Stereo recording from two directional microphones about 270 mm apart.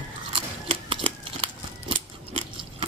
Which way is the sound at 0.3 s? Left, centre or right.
Centre.